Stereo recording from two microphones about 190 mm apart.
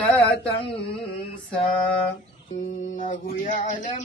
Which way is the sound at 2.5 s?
40° left (ahead or behind).